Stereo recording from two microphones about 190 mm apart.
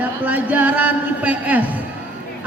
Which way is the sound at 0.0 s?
10° right (ahead or behind).